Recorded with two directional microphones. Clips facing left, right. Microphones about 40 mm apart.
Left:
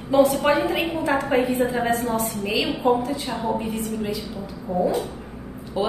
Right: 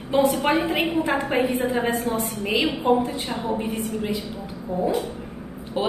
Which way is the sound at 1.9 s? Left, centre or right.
Right.